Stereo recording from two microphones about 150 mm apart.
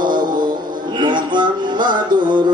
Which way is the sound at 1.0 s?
30° right (ahead or behind).